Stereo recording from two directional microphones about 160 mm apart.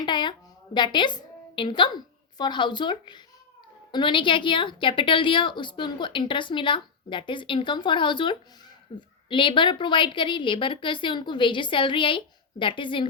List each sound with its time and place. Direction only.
0.0 s a woman's voice: 30° left (ahead or behind)